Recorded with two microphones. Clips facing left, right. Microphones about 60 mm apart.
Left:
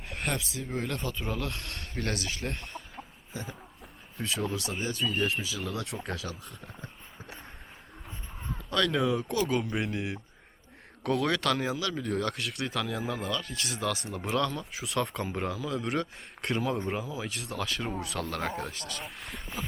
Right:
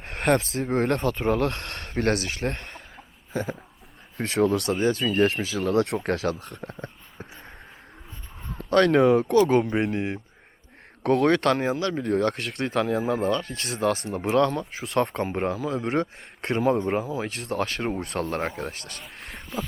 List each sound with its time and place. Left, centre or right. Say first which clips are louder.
0.0 s speech: right 11 dB; right
5.0 s speech: right 7 dB; right
5.4 s speech: right 11 dB; right
8.5 s speech: right 9 dB; right
19.5 s a sound: right 7 dB; left